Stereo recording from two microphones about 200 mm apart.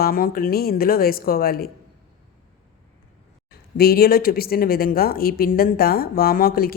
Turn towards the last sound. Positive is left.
turn(degrees=45)  # may be behind; listen again after turning